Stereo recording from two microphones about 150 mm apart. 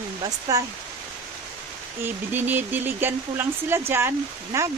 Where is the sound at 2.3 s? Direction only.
15° right (ahead or behind).